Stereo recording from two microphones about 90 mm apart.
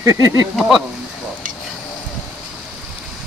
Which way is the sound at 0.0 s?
40° right (ahead or behind).